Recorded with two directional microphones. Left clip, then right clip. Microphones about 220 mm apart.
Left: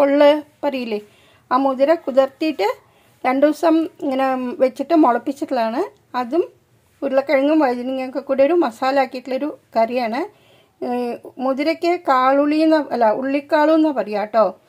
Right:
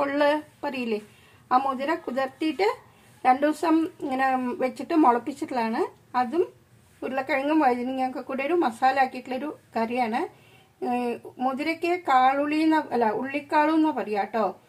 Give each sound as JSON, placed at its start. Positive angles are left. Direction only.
{"t": 0.0, "sound": "speech", "side_deg": 40}